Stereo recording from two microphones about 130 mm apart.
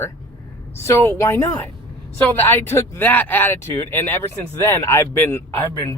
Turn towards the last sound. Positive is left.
turn(degrees=20)  # may be behind; listen again after turning